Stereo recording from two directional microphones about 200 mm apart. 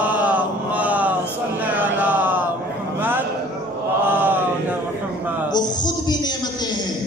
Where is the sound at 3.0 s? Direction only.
10° right (ahead or behind).